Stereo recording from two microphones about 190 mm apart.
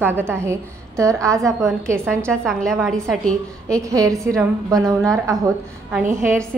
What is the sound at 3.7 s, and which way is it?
A woman's voice, 15° right (ahead or behind).